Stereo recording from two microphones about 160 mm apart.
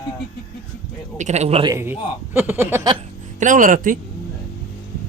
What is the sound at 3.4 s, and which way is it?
Speech, 55° right (ahead or behind).